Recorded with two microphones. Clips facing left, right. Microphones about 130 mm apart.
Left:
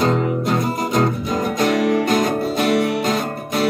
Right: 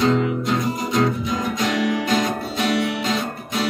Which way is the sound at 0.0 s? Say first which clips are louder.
Left 1 dB; 45° left (ahead or behind).